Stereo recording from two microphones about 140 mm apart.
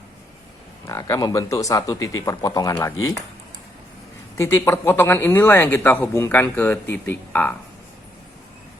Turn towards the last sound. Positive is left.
turn(degrees=15)  # may be behind; listen again after turning